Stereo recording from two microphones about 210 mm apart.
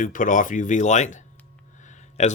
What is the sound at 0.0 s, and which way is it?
Speech, 40° left (ahead or behind).